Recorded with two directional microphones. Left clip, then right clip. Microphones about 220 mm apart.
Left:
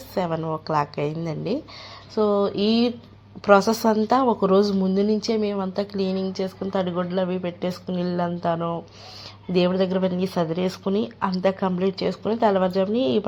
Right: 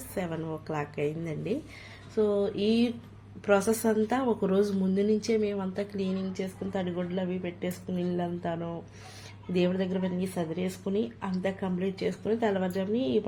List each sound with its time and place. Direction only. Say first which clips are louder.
0.1 s speech: left 9 dB; 20° left (ahead or behind)